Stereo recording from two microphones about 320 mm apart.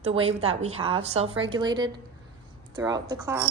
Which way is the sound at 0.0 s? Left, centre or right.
Centre.